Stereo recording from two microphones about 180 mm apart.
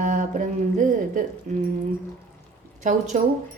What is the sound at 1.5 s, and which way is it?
Speech, 45° right (ahead or behind).